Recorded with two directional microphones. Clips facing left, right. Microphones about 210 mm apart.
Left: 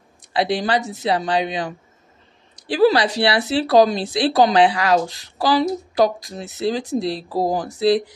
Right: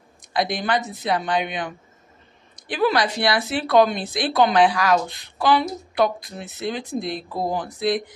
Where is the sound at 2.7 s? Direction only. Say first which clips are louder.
Left 5 dB; 30° left (ahead or behind).